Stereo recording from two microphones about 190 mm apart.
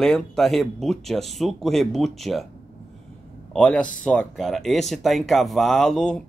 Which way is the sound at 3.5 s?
5° left (ahead or behind).